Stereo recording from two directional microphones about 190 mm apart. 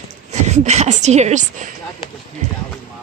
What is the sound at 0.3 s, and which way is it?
Speech, 35° right (ahead or behind).